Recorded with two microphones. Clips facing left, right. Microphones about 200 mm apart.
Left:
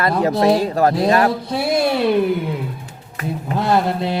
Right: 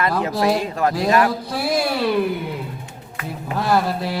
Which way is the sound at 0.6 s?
35° left (ahead or behind).